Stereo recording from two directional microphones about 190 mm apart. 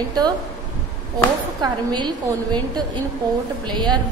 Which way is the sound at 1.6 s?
25° right (ahead or behind).